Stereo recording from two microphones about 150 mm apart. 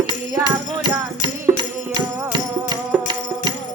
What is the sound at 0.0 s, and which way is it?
Music, 30° right (ahead or behind).